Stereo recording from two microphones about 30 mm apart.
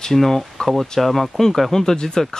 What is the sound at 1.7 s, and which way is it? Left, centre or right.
Speech, centre.